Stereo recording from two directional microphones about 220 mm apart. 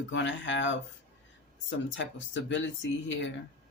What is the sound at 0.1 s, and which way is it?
Speech, 55° left (ahead or behind).